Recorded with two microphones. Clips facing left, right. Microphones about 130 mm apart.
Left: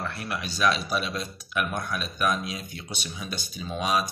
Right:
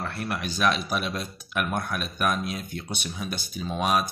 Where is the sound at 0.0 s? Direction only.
45° right (ahead or behind).